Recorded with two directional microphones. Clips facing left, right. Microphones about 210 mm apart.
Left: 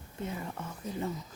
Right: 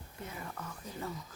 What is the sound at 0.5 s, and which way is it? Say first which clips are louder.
Speech: left 6 dB; 25° left (ahead or behind).